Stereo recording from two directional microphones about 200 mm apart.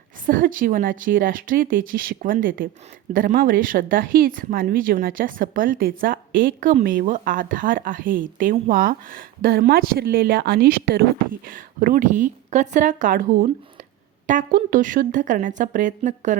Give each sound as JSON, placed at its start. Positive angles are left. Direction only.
{"t": 0.3, "sound": "a woman's voice", "side_deg": -45}